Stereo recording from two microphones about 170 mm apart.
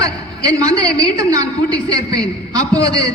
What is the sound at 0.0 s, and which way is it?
A man's voice, 20° right (ahead or behind).